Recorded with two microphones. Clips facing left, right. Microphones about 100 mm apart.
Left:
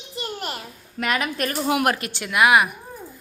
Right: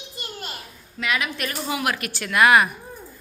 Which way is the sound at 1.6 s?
60° left (ahead or behind).